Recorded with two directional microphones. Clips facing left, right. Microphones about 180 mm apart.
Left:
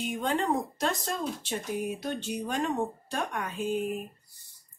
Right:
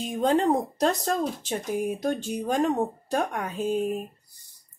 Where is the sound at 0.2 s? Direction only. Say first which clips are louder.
Right 8 dB; 35° right (ahead or behind).